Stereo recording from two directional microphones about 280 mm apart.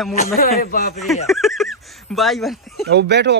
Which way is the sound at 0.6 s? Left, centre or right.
Left.